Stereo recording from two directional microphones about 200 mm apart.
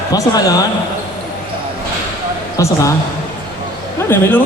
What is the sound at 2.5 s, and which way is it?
Speech, 15° left (ahead or behind).